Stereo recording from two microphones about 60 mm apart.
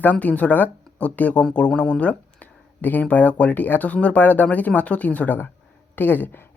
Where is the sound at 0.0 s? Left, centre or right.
Left.